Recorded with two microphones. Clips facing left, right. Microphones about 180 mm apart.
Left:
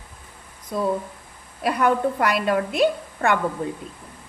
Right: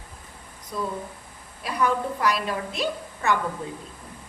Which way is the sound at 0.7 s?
50° left (ahead or behind).